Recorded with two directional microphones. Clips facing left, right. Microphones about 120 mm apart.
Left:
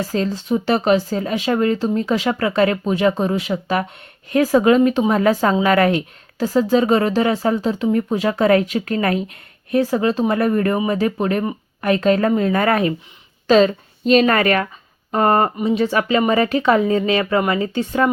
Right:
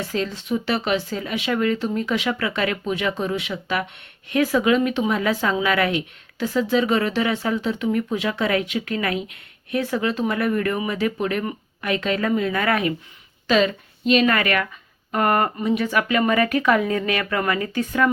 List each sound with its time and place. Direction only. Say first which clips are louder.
0.0 s speech: left 5 dB; 35° left (ahead or behind)